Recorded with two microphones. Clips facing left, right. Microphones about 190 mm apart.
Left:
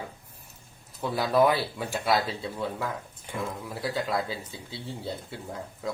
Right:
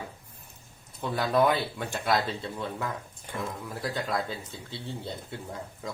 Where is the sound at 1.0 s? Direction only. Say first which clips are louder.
Left 2 dB; centre (ahead or behind).